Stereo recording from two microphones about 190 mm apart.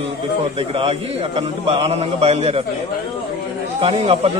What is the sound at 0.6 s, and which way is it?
A man's voice, 30° right (ahead or behind).